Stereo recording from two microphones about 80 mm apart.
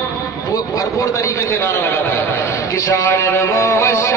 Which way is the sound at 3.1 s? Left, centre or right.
Left.